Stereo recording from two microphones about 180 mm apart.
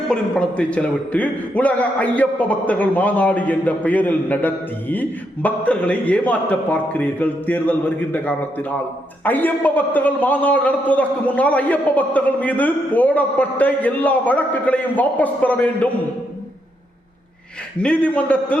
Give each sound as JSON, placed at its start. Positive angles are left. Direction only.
{"t": 0.1, "sound": "a man's voice", "side_deg": 5}
{"t": 17.7, "sound": "a man's voice", "side_deg": 5}